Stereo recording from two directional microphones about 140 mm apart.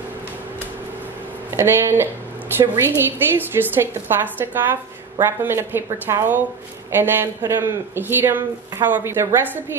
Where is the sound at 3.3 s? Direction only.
15° right (ahead or behind).